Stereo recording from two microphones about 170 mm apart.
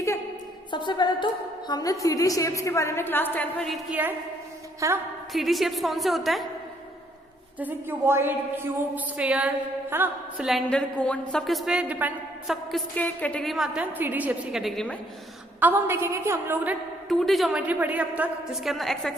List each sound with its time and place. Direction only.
0.7 s a woman's voice: 25° left (ahead or behind); by 3.8 s 5° left (ahead or behind)
4.8 s a woman's voice: 20° right (ahead or behind)
5.3 s a woman's voice: centre (ahead or behind)
7.6 s a woman's voice: 15° right (ahead or behind)
9.9 s mantra: 10° right (ahead or behind)
10.4 s a woman's voice: 5° left (ahead or behind)
12.7 s a woman's voice: 10° left (ahead or behind)
15.6 s a woman's voice: 15° right (ahead or behind)
17.1 s a woman's voice: centre (ahead or behind)